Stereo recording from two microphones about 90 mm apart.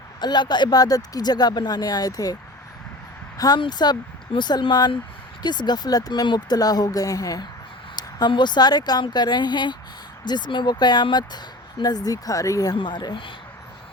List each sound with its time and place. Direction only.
0.2 s speech: 55° left (ahead or behind)
3.3 s speech: 45° left (ahead or behind)
8.3 s speech: 55° left (ahead or behind); by 12.7 s 40° left (ahead or behind)
12.7 s speech: 60° left (ahead or behind)